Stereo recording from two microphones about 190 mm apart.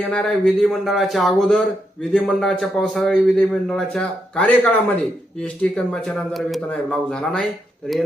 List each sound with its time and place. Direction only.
0.0 s speech: 5° left (ahead or behind)